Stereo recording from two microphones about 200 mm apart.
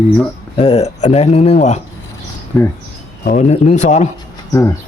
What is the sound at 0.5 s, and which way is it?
Speech, 30° left (ahead or behind).